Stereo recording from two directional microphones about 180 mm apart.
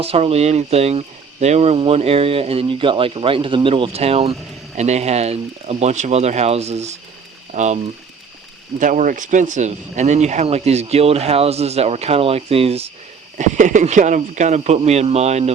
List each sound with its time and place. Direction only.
0.0 s speech: 35° right (ahead or behind)
8.8 s speech: 45° right (ahead or behind)